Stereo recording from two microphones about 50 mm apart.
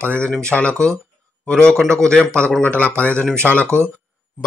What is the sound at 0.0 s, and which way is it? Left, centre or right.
A man's voice, left.